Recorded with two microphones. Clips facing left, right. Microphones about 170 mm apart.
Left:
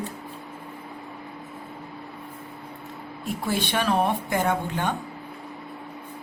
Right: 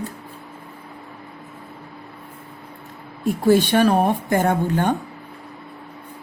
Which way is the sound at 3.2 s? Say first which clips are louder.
Right 11 dB; 45° right (ahead or behind).